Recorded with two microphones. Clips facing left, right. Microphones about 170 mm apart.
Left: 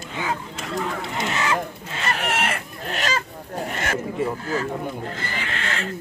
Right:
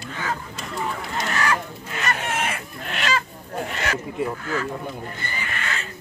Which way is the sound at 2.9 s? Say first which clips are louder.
Even; 40° left (ahead or behind).